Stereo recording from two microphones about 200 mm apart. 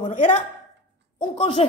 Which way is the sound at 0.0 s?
40° left (ahead or behind).